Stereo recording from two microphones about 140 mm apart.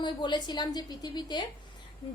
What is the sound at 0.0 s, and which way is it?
A woman's voice, 35° left (ahead or behind).